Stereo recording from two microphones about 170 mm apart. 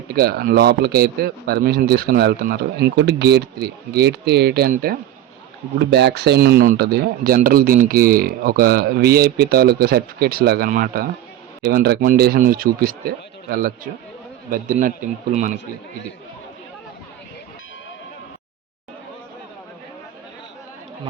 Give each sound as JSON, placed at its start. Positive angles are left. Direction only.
{"t": 0.1, "sound": "speech", "side_deg": -65}
{"t": 5.8, "sound": "a man's voice", "side_deg": -85}